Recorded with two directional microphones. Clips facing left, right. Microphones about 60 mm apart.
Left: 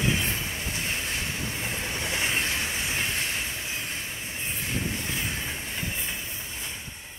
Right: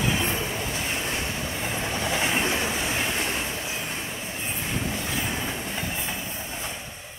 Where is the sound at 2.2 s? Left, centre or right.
Right.